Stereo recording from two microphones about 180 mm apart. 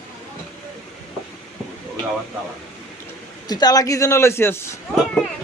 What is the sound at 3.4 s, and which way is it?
A man's voice, 20° left (ahead or behind).